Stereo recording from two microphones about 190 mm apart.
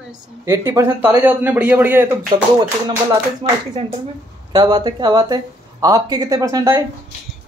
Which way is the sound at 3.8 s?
30° right (ahead or behind).